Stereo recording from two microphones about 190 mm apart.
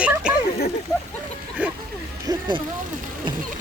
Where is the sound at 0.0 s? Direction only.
5° right (ahead or behind).